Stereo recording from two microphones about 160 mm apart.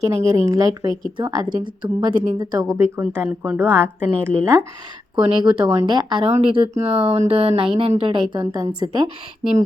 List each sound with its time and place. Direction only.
0.0 s a woman's voice: 20° right (ahead or behind)
2.7 s a woman's voice: 15° right (ahead or behind)
5.1 s a woman's voice: 30° right (ahead or behind)